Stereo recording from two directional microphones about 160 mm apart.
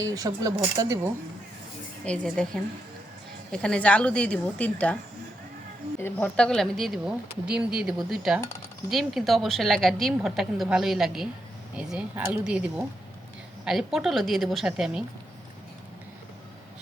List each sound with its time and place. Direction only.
0.0 s speech: 20° right (ahead or behind)
2.0 s a woman's voice: 5° left (ahead or behind)
6.0 s a woman's voice: 15° left (ahead or behind); by 15.0 s 5° right (ahead or behind)